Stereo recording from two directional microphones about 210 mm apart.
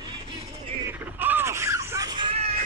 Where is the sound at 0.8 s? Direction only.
10° right (ahead or behind); by 2.5 s 25° right (ahead or behind).